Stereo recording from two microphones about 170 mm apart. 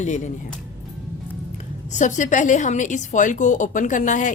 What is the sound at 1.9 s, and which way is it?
A woman's voice, 45° left (ahead or behind).